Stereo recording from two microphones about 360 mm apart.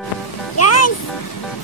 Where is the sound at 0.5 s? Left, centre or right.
Left.